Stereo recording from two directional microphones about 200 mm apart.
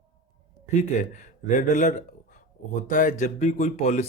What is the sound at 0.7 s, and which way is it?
A man's voice, 35° left (ahead or behind).